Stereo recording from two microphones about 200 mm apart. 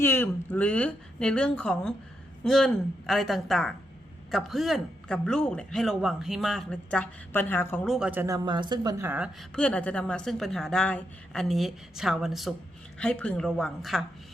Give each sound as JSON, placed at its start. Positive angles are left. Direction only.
{"t": 0.0, "sound": "a woman's voice", "side_deg": 10}
{"t": 7.9, "sound": "speech", "side_deg": -5}
{"t": 8.4, "sound": "a woman's voice", "side_deg": -20}
{"t": 9.6, "sound": "a man's voice", "side_deg": 5}